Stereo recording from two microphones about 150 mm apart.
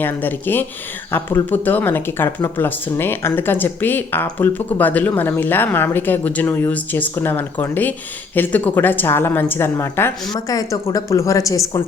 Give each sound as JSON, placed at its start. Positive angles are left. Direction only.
{"t": 0.0, "sound": "speech", "side_deg": 15}